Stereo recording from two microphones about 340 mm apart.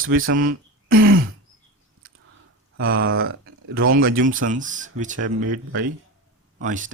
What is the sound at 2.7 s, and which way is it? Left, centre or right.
Speech, right.